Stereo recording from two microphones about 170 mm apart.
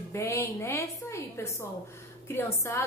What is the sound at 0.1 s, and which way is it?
A woman's voice, 15° left (ahead or behind).